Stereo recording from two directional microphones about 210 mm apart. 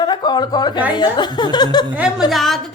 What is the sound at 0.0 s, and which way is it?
Speech, 20° left (ahead or behind).